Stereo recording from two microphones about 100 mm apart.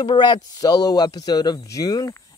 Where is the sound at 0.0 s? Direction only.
50° left (ahead or behind).